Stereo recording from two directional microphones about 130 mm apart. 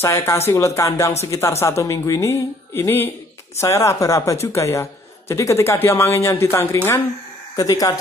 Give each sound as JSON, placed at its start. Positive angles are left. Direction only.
{"t": 0.0, "sound": "speech", "side_deg": 20}